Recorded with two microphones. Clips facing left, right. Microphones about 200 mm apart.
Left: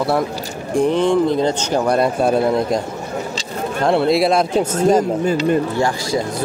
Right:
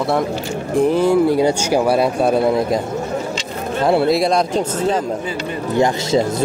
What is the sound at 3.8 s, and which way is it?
Speech, centre (ahead or behind).